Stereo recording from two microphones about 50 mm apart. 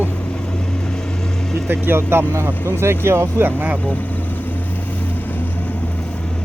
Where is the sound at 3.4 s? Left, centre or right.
Right.